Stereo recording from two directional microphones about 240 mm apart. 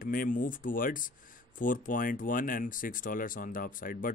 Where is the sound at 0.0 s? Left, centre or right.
Left.